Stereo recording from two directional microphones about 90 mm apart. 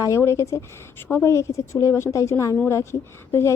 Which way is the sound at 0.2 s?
30° left (ahead or behind).